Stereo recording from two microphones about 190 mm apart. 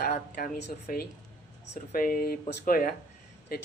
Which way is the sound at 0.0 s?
50° left (ahead or behind).